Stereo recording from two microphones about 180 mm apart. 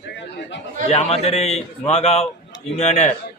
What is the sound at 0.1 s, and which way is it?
Chatter, 85° left.